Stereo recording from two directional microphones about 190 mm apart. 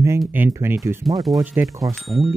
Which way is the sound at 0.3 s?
10° right (ahead or behind).